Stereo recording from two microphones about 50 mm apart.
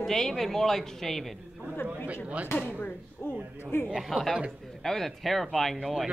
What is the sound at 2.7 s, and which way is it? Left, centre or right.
Speech, left.